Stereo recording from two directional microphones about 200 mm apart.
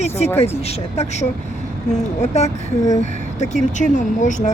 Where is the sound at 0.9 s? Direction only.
35° left (ahead or behind).